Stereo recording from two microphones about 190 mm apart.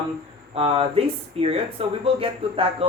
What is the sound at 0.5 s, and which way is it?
Speech, 30° right (ahead or behind).